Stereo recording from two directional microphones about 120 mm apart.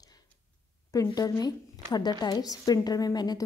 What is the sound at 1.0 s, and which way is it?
A woman's voice, 30° left (ahead or behind).